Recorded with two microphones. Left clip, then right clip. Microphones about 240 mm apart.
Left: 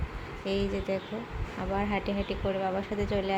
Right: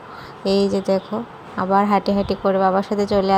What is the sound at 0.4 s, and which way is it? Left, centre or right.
Speech, right.